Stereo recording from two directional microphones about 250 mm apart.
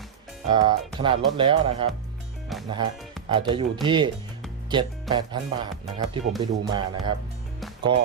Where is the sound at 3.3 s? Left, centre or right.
Centre.